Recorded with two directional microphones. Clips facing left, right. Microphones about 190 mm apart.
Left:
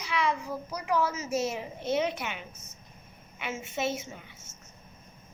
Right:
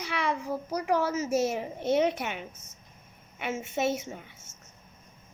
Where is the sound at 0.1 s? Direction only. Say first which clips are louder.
Left 1 dB; 50° right (ahead or behind).